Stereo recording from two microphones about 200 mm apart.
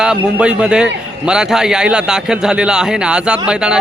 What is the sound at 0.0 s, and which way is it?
A man's voice, 5° right (ahead or behind).